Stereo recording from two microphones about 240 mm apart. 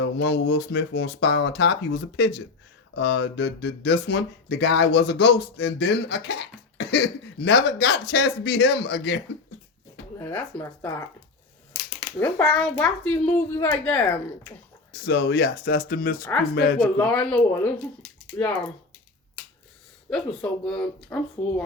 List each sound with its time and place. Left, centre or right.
0.2 s speech: left
10.2 s speech: centre
11.7 s a sound: centre
12.5 s a child's voice: centre
15.0 s speech: left
16.8 s a child's voice: centre
20.1 s a child's voice: centre